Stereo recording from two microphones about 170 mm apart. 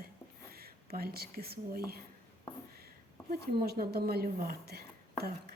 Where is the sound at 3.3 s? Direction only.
65° right (ahead or behind).